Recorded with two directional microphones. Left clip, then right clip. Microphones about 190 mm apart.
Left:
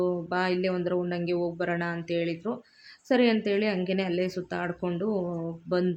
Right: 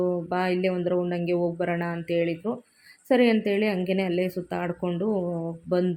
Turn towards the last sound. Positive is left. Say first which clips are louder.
# right 2 dB
turn(degrees=-15)  # may be behind; listen again after turning